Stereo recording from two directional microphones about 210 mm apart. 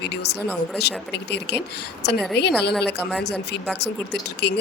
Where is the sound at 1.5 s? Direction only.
55° left (ahead or behind).